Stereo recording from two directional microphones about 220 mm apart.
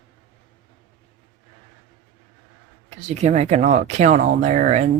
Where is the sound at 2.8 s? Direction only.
30° right (ahead or behind).